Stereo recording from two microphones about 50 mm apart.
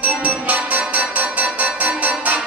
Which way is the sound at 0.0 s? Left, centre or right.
Right.